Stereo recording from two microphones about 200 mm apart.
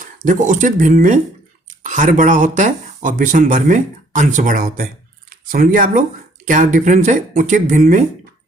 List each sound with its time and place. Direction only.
0.0 s speech: 40° right (ahead or behind)